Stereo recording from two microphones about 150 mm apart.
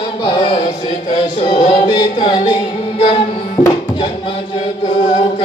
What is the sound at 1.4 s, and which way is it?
Music, 30° left (ahead or behind).